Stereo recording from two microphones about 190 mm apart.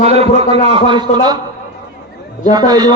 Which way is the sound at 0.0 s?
30° right (ahead or behind).